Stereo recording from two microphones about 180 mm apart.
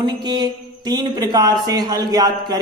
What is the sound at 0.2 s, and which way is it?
A man's voice, 25° right (ahead or behind).